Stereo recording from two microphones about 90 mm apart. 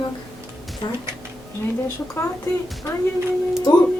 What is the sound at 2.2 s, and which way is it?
Speech, 25° left (ahead or behind).